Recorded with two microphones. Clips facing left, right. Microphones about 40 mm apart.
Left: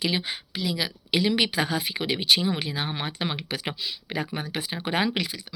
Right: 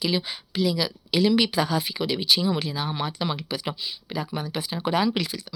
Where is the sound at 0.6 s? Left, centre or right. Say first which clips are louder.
Right 6 dB; centre.